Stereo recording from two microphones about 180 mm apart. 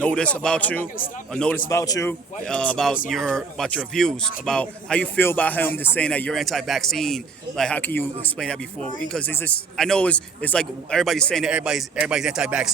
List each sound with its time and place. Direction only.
0.0 s speech: 5° left (ahead or behind)
1.7 s speech: 20° left (ahead or behind)
2.4 s a man's voice: 5° left (ahead or behind)